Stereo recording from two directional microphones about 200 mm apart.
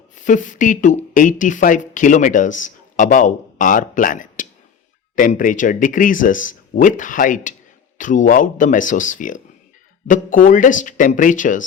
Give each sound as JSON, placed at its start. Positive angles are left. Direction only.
{"t": 0.3, "sound": "speech", "side_deg": 40}